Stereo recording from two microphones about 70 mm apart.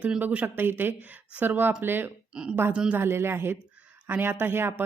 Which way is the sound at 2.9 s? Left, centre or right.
Right.